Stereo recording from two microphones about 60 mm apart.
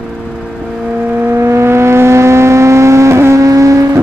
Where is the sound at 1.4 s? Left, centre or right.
Right.